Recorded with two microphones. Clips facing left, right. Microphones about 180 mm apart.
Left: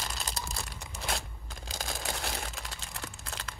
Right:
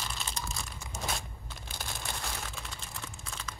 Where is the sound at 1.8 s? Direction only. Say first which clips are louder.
Left 4 dB; 90° left.